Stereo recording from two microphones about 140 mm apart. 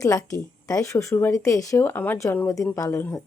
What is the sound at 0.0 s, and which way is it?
Speech, 25° left (ahead or behind).